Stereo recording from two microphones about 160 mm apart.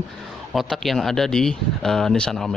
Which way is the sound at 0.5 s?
Centre (ahead or behind).